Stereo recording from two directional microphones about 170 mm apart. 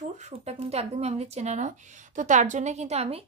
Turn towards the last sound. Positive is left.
turn(degrees=-40)  # may be behind; listen again after turning